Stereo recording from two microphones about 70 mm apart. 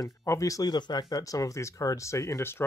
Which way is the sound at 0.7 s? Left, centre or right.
Left.